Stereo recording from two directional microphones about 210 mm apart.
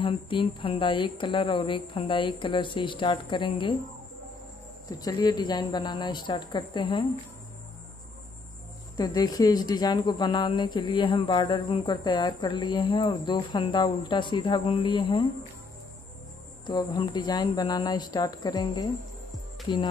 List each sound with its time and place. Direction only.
0.0 s a woman's voice: 25° left (ahead or behind)
4.8 s a woman's voice: 20° left (ahead or behind)
8.9 s a woman's voice: 20° left (ahead or behind)
16.6 s a woman's voice: 20° left (ahead or behind)